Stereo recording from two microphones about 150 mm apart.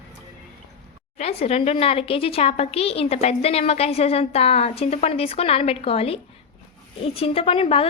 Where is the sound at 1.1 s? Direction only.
40° left (ahead or behind).